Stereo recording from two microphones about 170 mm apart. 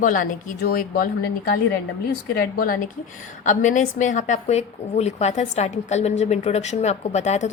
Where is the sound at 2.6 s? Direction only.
55° left (ahead or behind).